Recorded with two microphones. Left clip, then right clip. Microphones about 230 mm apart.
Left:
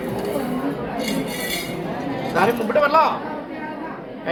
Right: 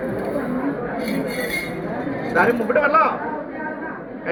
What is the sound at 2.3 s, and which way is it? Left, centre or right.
Speech, centre.